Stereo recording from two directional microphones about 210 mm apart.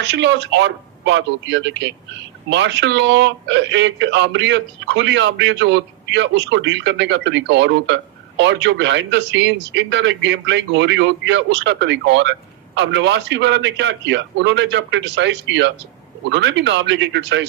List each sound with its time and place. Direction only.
0.0 s speech: 55° right (ahead or behind)